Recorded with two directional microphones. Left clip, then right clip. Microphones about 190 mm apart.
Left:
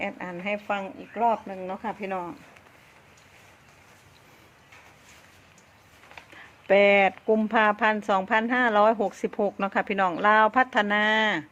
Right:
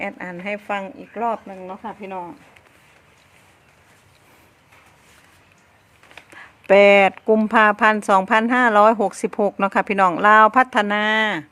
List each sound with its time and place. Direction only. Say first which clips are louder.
0.0 s speech: right 3 dB; 20° right (ahead or behind)
1.5 s speech: even; centre (ahead or behind)
6.1 s speech: right 5 dB; 35° right (ahead or behind)